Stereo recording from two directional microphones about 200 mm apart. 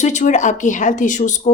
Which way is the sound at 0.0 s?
35° left (ahead or behind).